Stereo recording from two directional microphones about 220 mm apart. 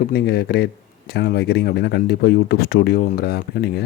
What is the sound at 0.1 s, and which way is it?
Speech, 45° left (ahead or behind).